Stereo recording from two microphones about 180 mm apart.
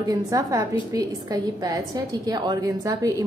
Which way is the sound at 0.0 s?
20° right (ahead or behind).